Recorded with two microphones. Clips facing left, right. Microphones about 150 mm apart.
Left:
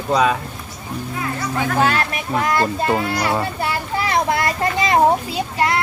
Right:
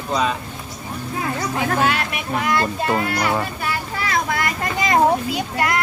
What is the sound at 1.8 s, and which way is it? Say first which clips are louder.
Speech: left 2 dB; 40° left (ahead or behind).